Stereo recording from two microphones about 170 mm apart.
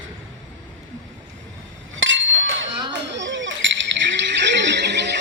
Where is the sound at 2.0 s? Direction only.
90° right.